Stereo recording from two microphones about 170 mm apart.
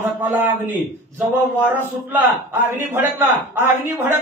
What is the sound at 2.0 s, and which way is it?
A man's voice, 10° right (ahead or behind).